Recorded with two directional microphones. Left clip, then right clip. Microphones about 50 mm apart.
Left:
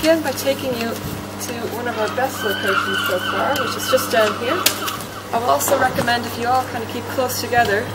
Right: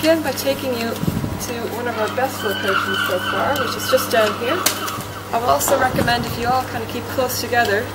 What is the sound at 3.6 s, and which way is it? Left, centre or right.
Speech, centre.